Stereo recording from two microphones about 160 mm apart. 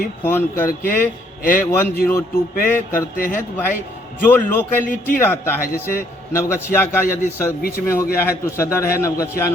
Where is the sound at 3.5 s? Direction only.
15° left (ahead or behind).